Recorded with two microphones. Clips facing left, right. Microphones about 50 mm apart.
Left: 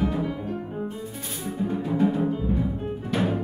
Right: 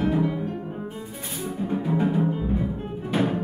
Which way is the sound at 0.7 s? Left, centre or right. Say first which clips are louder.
Left 2 dB; centre.